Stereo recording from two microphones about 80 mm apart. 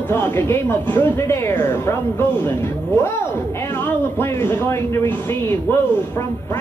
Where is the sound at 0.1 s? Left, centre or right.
Left.